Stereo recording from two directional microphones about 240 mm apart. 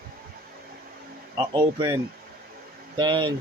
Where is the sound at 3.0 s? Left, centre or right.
Centre.